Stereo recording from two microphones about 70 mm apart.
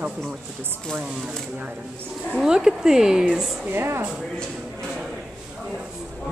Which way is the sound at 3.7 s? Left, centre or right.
Right.